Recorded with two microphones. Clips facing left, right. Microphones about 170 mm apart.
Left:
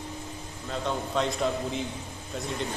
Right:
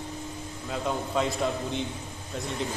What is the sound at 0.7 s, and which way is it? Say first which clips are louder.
A man's voice: right 1 dB; centre (ahead or behind).